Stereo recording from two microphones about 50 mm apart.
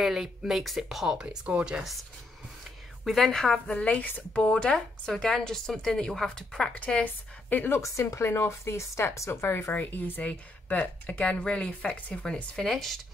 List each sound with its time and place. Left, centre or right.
0.0 s speech: centre
3.0 s a woman's voice: centre
3.6 s speech: left
4.3 s a woman's voice: centre
7.4 s speech: left
7.8 s speech: left
9.4 s speech: left
9.7 s speech: left
10.2 s speech: left
12.5 s speech: centre